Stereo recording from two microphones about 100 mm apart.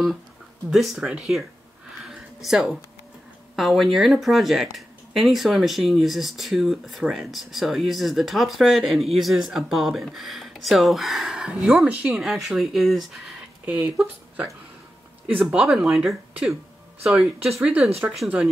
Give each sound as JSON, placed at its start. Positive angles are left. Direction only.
{"t": 0.7, "sound": "speech", "side_deg": 0}
{"t": 2.0, "sound": "a sound", "side_deg": -5}
{"t": 3.5, "sound": "speech", "side_deg": 0}
{"t": 13.7, "sound": "speech", "side_deg": -15}
{"t": 15.6, "sound": "speech", "side_deg": -5}